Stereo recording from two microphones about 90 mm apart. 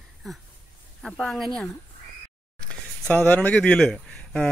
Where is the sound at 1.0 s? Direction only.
5° left (ahead or behind).